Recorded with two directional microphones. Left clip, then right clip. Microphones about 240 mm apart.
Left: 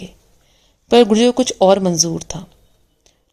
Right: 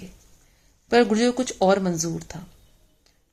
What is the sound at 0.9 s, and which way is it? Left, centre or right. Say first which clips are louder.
A woman's voice: left 8 dB; left.